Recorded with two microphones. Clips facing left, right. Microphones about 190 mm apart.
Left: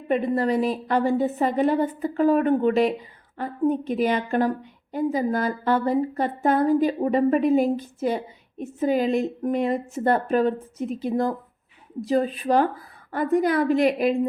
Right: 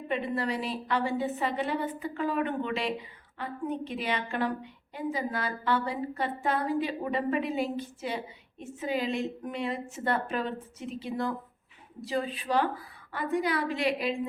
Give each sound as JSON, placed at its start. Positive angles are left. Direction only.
{"t": 0.1, "sound": "a woman's voice", "side_deg": 45}